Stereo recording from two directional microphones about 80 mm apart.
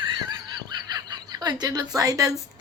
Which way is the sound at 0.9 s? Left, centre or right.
Right.